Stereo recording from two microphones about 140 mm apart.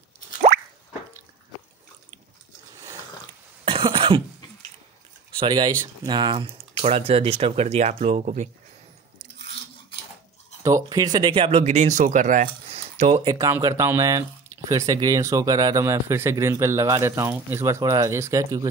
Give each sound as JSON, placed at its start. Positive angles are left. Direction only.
{"t": 3.6, "sound": "cough", "side_deg": -40}
{"t": 5.4, "sound": "speech", "side_deg": -30}
{"t": 10.6, "sound": "speech", "side_deg": -25}
{"t": 11.6, "sound": "speech", "side_deg": -60}
{"t": 13.2, "sound": "speech", "side_deg": -30}